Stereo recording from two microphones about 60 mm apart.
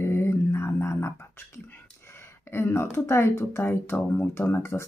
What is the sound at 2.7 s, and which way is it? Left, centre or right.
Speech, left.